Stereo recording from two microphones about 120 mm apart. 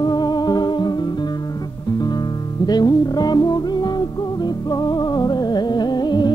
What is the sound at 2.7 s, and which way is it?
Music, 35° left (ahead or behind).